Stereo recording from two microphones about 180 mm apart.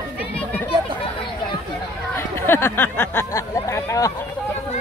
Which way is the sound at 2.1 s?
10° left (ahead or behind).